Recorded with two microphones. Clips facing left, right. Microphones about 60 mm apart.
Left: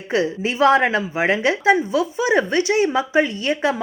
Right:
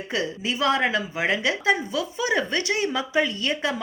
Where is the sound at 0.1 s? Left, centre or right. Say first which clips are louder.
Left 7 dB; left.